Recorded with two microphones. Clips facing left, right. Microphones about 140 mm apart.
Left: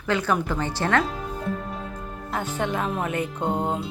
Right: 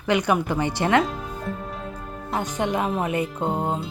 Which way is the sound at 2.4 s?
15° right (ahead or behind).